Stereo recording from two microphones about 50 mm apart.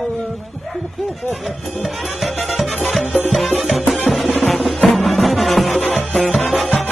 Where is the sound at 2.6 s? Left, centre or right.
Centre.